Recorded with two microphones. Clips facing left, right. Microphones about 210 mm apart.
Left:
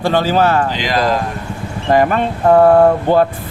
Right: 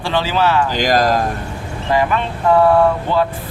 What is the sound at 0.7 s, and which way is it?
Speech, 45° right (ahead or behind).